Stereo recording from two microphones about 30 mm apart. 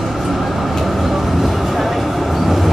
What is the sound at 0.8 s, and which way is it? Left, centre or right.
Train, centre.